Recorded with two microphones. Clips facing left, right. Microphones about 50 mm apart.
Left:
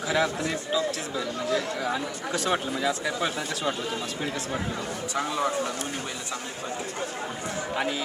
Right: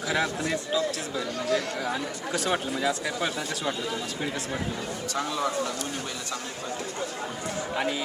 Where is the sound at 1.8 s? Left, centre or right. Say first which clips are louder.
Left 1 dB; centre.